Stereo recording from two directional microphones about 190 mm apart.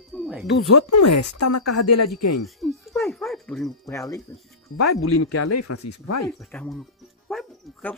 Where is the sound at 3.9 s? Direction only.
15° left (ahead or behind).